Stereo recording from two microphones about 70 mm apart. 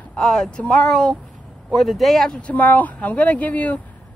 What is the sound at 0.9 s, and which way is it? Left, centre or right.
A man's voice, centre.